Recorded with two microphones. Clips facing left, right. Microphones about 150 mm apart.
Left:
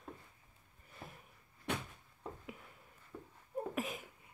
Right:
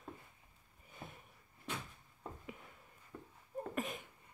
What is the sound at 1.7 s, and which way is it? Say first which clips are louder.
Cupboard open or close: left 5 dB; 65° left (ahead or behind).